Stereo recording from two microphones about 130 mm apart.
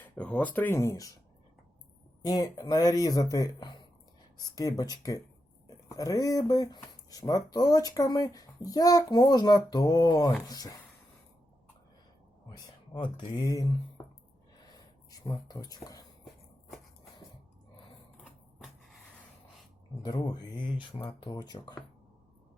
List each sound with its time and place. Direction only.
0.0 s speech: 10° left (ahead or behind)
2.2 s speech: 25° left (ahead or behind)
12.5 s speech: 35° left (ahead or behind)
15.1 s speech: 30° left (ahead or behind)
18.2 s a sound: centre (ahead or behind)
20.1 s speech: 30° left (ahead or behind)